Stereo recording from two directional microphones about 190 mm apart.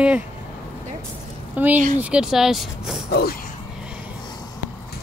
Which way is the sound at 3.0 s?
55° left (ahead or behind).